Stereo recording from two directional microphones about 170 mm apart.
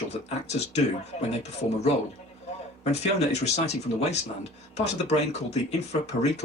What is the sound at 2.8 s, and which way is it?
Speech, 40° left (ahead or behind).